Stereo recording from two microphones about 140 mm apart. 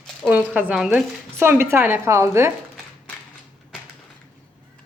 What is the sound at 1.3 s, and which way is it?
Speech, 20° right (ahead or behind).